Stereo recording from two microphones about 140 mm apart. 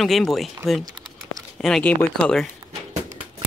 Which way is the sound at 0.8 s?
30° right (ahead or behind).